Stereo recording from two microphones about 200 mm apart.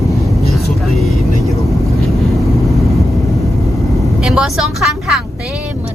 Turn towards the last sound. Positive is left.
turn(degrees=0)  # may be behind; listen again after turning